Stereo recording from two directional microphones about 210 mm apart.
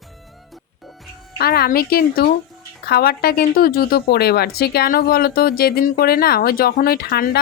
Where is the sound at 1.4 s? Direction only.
45° left (ahead or behind).